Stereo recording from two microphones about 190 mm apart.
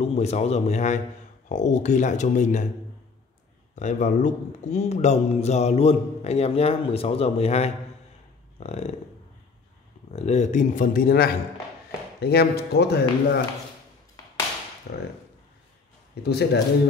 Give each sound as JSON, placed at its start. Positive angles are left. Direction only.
{"t": 0.0, "sound": "a man's voice", "side_deg": 35}
{"t": 3.7, "sound": "a man's voice", "side_deg": 40}
{"t": 10.1, "sound": "a man's voice", "side_deg": 35}
{"t": 14.9, "sound": "speech", "side_deg": 60}
{"t": 16.2, "sound": "speech", "side_deg": 60}